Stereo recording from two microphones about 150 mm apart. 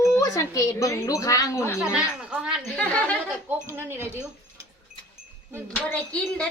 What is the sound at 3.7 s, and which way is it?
Speech, 15° right (ahead or behind).